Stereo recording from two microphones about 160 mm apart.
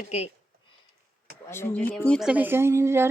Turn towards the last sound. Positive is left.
turn(degrees=-15)  # may be behind; listen again after turning